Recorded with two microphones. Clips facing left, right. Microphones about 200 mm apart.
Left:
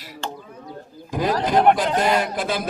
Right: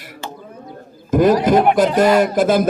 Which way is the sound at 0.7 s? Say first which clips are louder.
Right 13 dB; 50° right (ahead or behind).